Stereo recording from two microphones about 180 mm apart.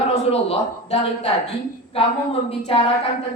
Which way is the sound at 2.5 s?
30° left (ahead or behind).